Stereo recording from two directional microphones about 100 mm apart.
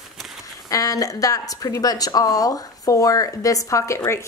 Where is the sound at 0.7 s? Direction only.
35° left (ahead or behind).